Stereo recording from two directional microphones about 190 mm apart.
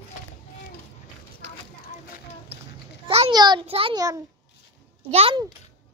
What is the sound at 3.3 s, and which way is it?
Speech, 20° right (ahead or behind).